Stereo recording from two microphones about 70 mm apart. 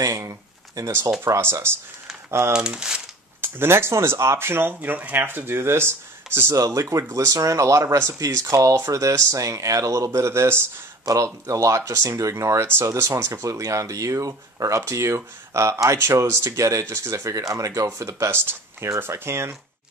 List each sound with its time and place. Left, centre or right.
0.0 s a sound: right
1.2 s speech: right
2.5 s speech: centre
3.3 s speech: right
6.5 s speech: right
11.1 s speech: right
18.3 s speech: right